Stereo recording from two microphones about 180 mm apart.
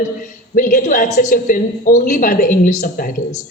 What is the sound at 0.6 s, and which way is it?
Speech, 45° left (ahead or behind).